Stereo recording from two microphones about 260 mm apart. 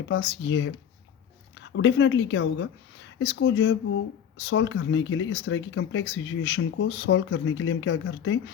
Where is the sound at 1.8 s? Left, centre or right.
Left.